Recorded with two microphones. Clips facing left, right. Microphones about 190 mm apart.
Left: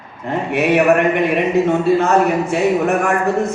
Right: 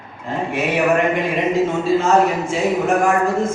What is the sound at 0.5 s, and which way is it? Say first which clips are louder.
A man's voice: left 4 dB; 65° left (ahead or behind).